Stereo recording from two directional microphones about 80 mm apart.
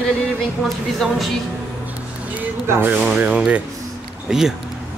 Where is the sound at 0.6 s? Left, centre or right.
Centre.